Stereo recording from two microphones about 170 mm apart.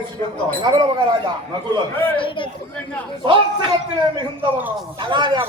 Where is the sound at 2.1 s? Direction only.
30° left (ahead or behind).